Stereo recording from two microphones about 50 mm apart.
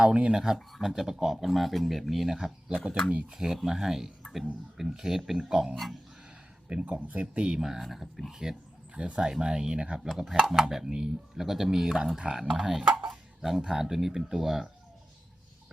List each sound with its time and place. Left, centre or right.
0.0 s speech: right
0.3 s speech: centre
3.1 s speech: right
3.3 s speech: centre
6.7 s speech: right
7.8 s speech: centre
9.0 s speech: right
10.2 s speech: centre
11.4 s speech: centre
13.1 s a sound: centre
13.6 s speech: centre